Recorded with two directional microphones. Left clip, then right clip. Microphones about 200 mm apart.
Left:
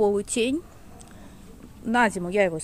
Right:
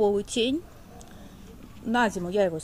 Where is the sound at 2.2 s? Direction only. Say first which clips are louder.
Left 2 dB; 25° left (ahead or behind).